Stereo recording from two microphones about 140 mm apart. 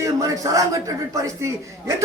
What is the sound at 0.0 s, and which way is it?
Speech, 25° right (ahead or behind).